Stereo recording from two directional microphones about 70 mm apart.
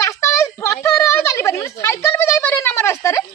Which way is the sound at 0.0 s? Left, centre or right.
Left.